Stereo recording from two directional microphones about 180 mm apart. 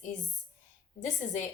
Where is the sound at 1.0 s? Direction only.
45° left (ahead or behind).